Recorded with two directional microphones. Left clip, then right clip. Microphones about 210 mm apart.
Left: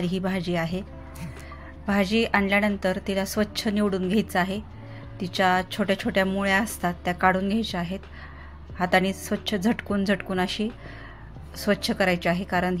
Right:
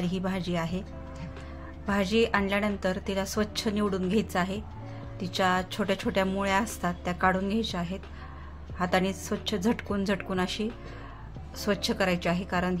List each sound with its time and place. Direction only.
0.0 s a woman's voice: 15° left (ahead or behind)